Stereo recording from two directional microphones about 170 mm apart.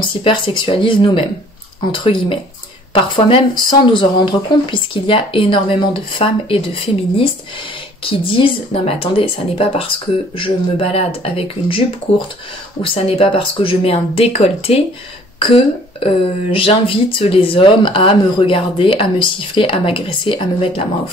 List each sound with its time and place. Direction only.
0.0 s speech: 30° left (ahead or behind)